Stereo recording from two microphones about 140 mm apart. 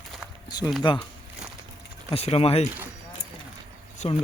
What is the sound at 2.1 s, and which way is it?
Speech, 45° left (ahead or behind).